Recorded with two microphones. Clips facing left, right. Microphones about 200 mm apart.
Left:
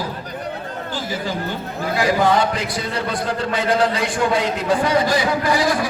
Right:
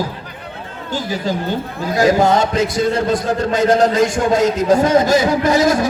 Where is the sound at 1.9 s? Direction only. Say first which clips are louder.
Right 4 dB; 45° right (ahead or behind).